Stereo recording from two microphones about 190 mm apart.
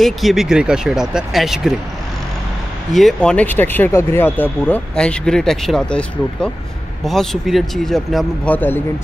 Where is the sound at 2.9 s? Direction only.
Centre (ahead or behind).